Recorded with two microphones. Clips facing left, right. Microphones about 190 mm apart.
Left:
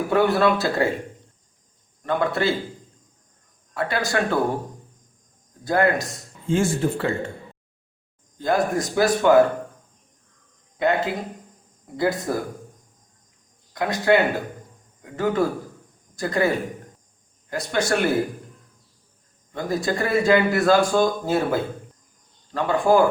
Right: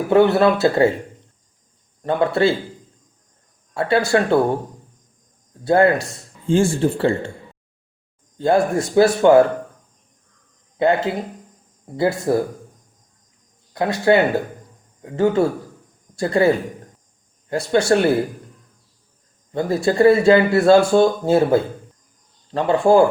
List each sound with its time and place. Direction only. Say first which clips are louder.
0.1 s speech: right 5 dB; 25° right (ahead or behind)
2.0 s speech: right 5 dB; 30° right (ahead or behind)
3.8 s speech: right 6 dB; 30° right (ahead or behind)
5.6 s speech: right 5 dB; 30° right (ahead or behind)
8.4 s speech: right 5 dB; 30° right (ahead or behind)
10.8 s speech: right 4 dB; 30° right (ahead or behind)
13.7 s speech: right 3 dB; 30° right (ahead or behind)
17.5 s speech: right 6 dB; 30° right (ahead or behind)
19.5 s speech: right 7 dB; 30° right (ahead or behind)